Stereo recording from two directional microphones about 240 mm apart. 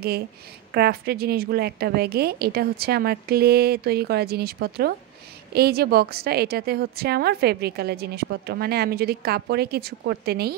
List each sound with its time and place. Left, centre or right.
0.7 s a woman's voice: right